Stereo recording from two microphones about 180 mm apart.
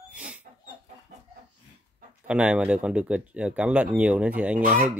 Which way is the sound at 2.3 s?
5° right (ahead or behind).